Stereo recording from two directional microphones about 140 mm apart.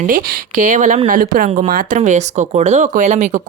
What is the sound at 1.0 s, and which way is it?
Speech, 75° right (ahead or behind).